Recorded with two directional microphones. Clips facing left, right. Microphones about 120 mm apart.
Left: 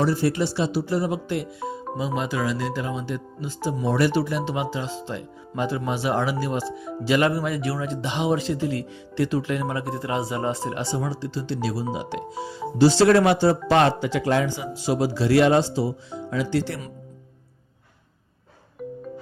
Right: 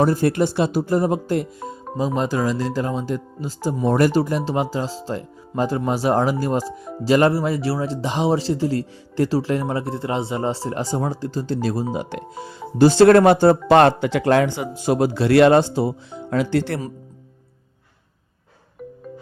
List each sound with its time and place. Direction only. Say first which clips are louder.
0.0 s speech: right 4 dB; 50° right (ahead or behind)
1.6 s music: right 3 dB; 45° right (ahead or behind)
2.1 s speech: right 4 dB; 40° right (ahead or behind); by 16.8 s 60° right (ahead or behind)